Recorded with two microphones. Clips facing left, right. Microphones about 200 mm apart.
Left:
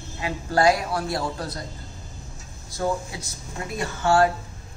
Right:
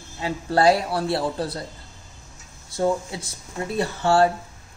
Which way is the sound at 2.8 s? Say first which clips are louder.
Right 3 dB; 25° right (ahead or behind).